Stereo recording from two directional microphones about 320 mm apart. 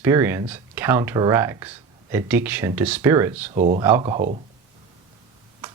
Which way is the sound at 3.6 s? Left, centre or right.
Right.